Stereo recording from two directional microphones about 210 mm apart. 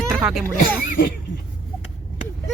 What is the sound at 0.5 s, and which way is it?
Speech, 40° left (ahead or behind).